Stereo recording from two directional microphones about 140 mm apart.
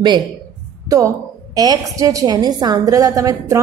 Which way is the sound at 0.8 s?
25° right (ahead or behind).